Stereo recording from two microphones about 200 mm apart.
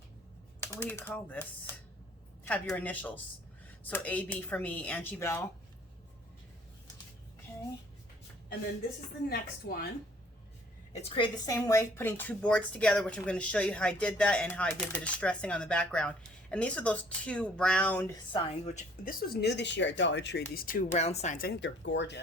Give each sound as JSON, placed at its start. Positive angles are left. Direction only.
{"t": 0.8, "sound": "speech", "side_deg": 10}
{"t": 9.3, "sound": "speech", "side_deg": 50}
{"t": 11.1, "sound": "a woman's voice", "side_deg": 20}
{"t": 18.3, "sound": "speech", "side_deg": 35}